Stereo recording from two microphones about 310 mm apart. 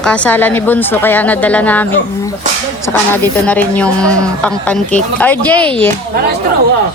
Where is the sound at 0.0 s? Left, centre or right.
Centre.